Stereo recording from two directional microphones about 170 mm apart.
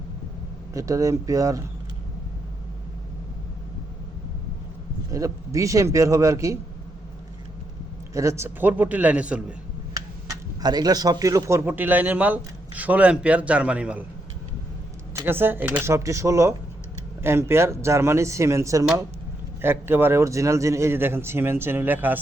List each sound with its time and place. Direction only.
0.7 s a man's voice: 20° right (ahead or behind)
5.1 s a man's voice: 20° right (ahead or behind)
8.1 s a man's voice: 20° right (ahead or behind)
9.9 s speech: 20° right (ahead or behind)
15.1 s a man's voice: 15° right (ahead or behind)